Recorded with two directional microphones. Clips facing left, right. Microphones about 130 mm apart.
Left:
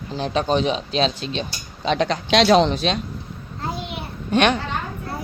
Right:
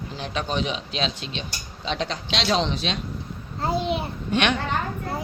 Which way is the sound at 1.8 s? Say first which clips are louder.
Left 7 dB; 60° left (ahead or behind).